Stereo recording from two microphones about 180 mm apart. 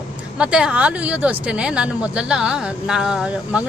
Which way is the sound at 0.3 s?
5° right (ahead or behind).